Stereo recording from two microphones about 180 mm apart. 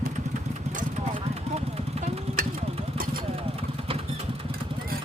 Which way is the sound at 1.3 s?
35° right (ahead or behind).